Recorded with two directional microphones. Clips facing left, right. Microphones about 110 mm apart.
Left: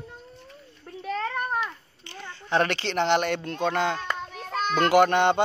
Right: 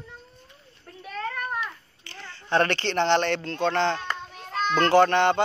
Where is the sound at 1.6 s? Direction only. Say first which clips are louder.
Left 2 dB; 20° left (ahead or behind).